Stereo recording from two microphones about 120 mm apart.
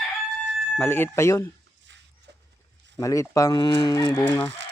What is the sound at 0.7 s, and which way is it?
Speech, 15° left (ahead or behind).